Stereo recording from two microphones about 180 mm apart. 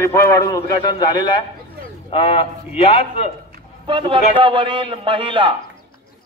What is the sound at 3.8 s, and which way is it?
A man's voice, 25° right (ahead or behind).